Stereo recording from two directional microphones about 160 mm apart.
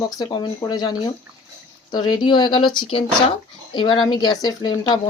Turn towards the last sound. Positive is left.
turn(degrees=25)  # may be behind; listen again after turning